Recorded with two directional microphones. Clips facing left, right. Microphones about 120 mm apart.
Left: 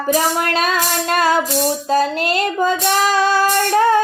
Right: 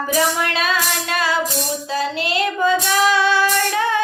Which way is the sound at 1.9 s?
45° left (ahead or behind).